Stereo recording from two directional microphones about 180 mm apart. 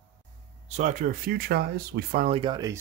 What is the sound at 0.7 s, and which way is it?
Speech, 40° right (ahead or behind).